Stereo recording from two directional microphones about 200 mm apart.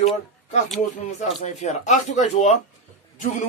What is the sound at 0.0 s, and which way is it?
Speech, 35° left (ahead or behind).